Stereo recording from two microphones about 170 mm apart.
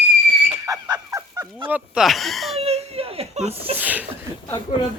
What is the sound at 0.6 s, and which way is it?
Fowl, 20° right (ahead or behind).